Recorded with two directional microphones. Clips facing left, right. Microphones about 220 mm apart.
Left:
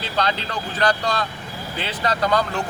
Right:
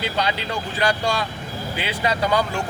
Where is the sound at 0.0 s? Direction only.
10° right (ahead or behind).